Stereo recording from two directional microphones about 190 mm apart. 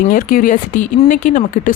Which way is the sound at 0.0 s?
45° left (ahead or behind).